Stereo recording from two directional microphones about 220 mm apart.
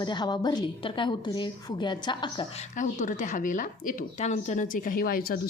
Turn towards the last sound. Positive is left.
turn(degrees=40)  # may be behind; listen again after turning